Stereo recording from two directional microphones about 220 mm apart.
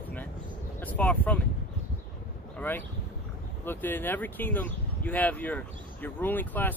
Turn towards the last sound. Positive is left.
turn(degrees=10)  # may be behind; listen again after turning